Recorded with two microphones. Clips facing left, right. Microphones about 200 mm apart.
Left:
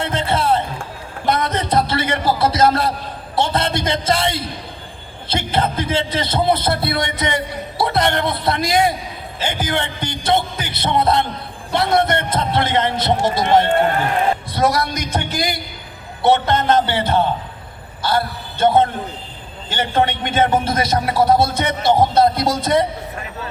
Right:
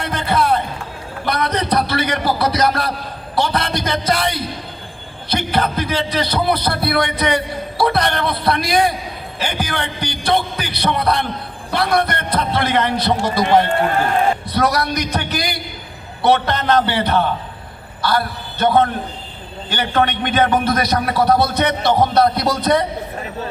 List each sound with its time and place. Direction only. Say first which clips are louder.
0.0 s a man's voice: right 1 dB; 25° left (ahead or behind)